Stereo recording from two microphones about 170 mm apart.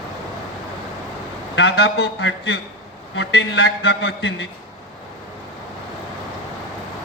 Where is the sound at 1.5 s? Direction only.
70° left (ahead or behind).